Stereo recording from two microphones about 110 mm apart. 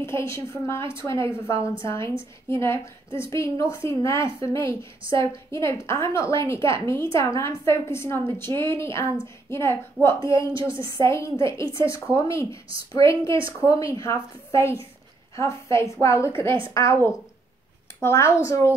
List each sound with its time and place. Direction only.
0.0 s a woman's voice: 25° left (ahead or behind)